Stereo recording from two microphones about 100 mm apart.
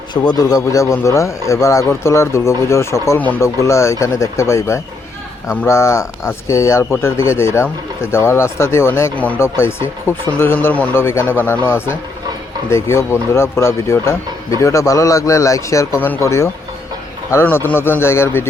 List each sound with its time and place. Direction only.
0.1 s speech: 40° left (ahead or behind); by 9.1 s 25° left (ahead or behind)
9.1 s speech: 15° left (ahead or behind)
9.4 s speech: 25° left (ahead or behind)
16.0 s speech: 20° left (ahead or behind)
16.2 s speech: 30° left (ahead or behind)